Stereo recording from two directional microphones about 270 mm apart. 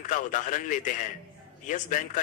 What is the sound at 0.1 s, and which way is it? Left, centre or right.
A man's voice, left.